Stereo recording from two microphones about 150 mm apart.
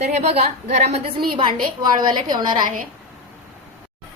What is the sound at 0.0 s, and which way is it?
Speech, 45° right (ahead or behind).